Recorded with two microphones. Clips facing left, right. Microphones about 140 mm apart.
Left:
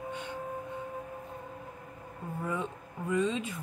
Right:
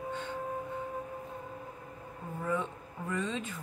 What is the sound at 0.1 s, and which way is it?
Music, 15° left (ahead or behind).